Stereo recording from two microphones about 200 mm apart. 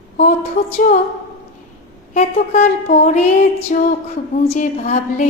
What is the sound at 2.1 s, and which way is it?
Speech, 35° left (ahead or behind).